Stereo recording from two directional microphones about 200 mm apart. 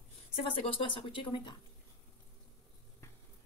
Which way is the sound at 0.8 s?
25° left (ahead or behind).